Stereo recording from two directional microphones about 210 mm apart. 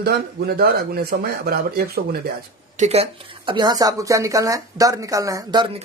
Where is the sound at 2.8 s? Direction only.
30° right (ahead or behind).